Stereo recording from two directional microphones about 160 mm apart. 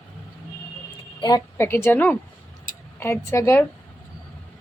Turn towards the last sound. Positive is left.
turn(degrees=15)  # may be behind; listen again after turning